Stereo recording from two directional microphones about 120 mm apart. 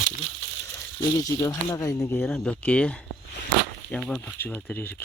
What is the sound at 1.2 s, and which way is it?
Speech, 30° left (ahead or behind).